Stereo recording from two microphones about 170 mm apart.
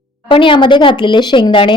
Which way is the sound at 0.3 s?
30° left (ahead or behind).